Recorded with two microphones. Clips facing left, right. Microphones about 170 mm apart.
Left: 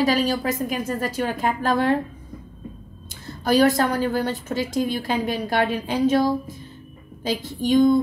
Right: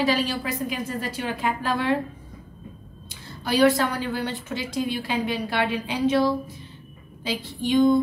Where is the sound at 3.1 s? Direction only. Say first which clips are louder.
Left 6 dB; 45° left (ahead or behind).